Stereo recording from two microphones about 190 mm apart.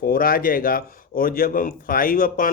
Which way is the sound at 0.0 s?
50° left (ahead or behind).